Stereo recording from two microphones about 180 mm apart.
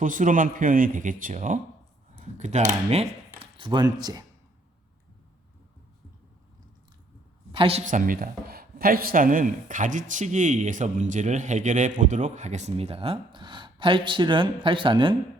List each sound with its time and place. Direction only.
0.0 s speech: 45° right (ahead or behind); by 4.2 s 20° right (ahead or behind)
7.5 s a woman's voice: 30° right (ahead or behind)
7.9 s speech: 50° right (ahead or behind); by 15.1 s 30° right (ahead or behind)